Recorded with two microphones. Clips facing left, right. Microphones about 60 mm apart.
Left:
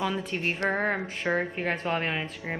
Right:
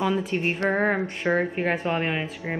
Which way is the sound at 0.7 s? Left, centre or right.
Centre.